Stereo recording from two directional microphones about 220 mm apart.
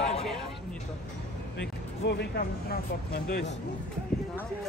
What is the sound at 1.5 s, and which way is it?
Speech, 50° left (ahead or behind).